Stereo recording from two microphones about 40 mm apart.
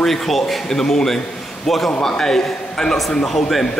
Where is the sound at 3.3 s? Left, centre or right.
Centre.